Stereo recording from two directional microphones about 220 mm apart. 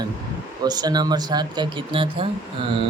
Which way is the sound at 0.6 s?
20° right (ahead or behind).